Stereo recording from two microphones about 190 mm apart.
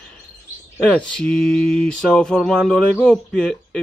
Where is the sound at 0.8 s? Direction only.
5° left (ahead or behind).